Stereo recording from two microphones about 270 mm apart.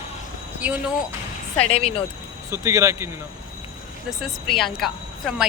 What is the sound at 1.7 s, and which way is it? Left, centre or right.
Speech, left.